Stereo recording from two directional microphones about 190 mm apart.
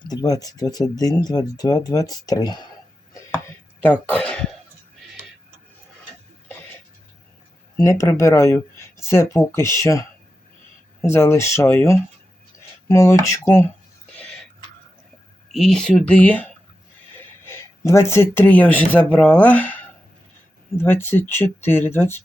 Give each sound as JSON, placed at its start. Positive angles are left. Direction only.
{"t": 0.1, "sound": "speech", "side_deg": 20}
{"t": 3.8, "sound": "speech", "side_deg": 10}
{"t": 7.8, "sound": "speech", "side_deg": 15}
{"t": 15.5, "sound": "speech", "side_deg": 0}
{"t": 17.2, "sound": "a sound", "side_deg": 10}
{"t": 17.9, "sound": "speech", "side_deg": 15}